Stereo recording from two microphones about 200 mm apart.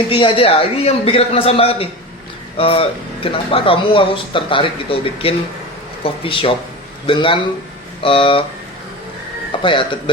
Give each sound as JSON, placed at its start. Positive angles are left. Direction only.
{"t": 0.1, "sound": "speech", "side_deg": 25}
{"t": 9.5, "sound": "speech", "side_deg": 25}